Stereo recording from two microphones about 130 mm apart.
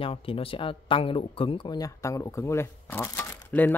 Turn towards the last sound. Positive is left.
turn(degrees=15)  # may be behind; listen again after turning